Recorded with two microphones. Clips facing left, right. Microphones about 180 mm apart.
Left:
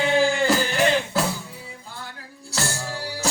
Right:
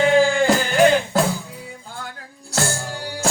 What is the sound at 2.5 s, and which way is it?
Music, 50° right (ahead or behind).